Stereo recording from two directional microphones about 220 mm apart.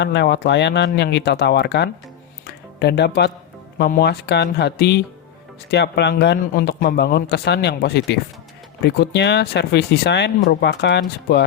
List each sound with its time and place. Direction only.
0.0 s speech: 50° left (ahead or behind)